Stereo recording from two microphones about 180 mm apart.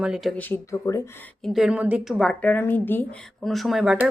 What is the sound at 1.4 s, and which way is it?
Speech, centre (ahead or behind).